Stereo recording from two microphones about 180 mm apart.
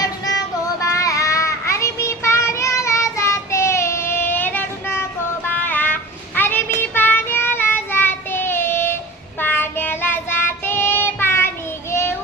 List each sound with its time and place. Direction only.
0.0 s child singing: 20° left (ahead or behind)